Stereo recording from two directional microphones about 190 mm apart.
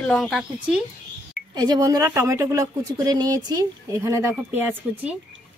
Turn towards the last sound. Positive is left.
turn(degrees=-10)  # may be behind; listen again after turning